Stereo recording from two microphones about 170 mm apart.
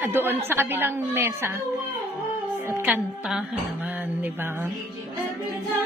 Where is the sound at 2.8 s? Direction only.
5° right (ahead or behind).